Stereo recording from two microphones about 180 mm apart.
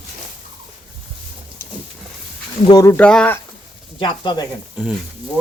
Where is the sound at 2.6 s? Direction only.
20° left (ahead or behind).